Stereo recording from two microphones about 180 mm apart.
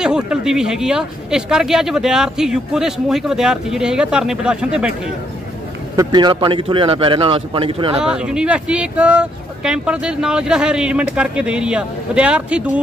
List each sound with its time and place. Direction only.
0.0 s speech: 5° right (ahead or behind)
5.9 s speech: 25° right (ahead or behind)
8.0 s speech: 5° right (ahead or behind)